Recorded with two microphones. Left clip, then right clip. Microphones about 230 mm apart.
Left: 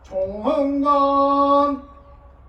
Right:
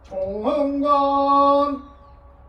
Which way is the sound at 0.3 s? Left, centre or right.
Centre.